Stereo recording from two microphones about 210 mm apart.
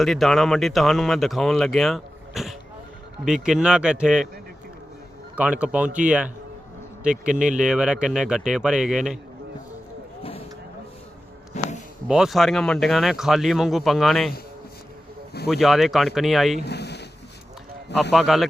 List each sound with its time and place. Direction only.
0.0 s speech: centre (ahead or behind)
5.4 s speech: 5° right (ahead or behind)
7.6 s speech: 5° right (ahead or behind)
11.6 s music: 30° left (ahead or behind)
12.0 s speech: 5° right (ahead or behind)
15.4 s speech: centre (ahead or behind)
16.6 s a sound: 55° left (ahead or behind)
18.1 s speech: centre (ahead or behind)